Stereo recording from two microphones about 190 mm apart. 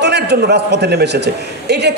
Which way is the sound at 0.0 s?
60° right (ahead or behind).